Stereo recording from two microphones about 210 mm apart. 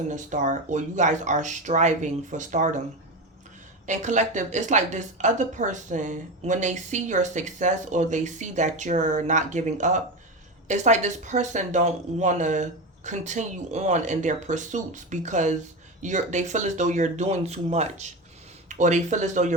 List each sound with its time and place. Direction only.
0.1 s a woman's voice: 35° right (ahead or behind)
3.8 s a woman's voice: 35° right (ahead or behind)